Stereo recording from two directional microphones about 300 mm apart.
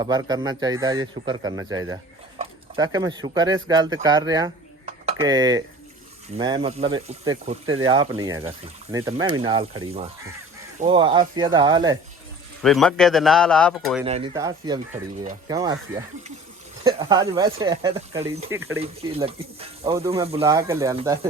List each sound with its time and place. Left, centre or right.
0.0 s speech: centre
4.9 s a sound: centre
6.3 s speech: centre
12.6 s speech: centre
14.0 s speech: centre
16.8 s speech: centre